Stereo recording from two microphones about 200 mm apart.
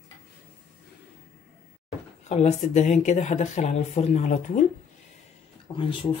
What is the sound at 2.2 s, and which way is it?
Speech, 35° left (ahead or behind).